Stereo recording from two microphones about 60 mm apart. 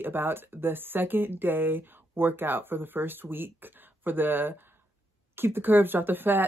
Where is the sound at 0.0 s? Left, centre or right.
Right.